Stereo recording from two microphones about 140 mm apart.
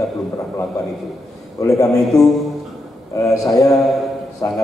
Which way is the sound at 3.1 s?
25° left (ahead or behind).